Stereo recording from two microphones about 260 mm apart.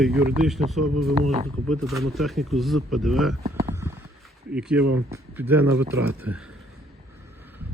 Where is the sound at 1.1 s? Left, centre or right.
Right.